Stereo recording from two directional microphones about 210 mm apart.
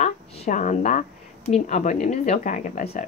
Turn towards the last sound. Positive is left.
turn(degrees=35)  # may be behind; listen again after turning